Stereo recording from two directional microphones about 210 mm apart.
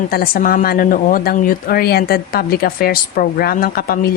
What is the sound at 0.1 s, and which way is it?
A woman's voice, 45° left (ahead or behind).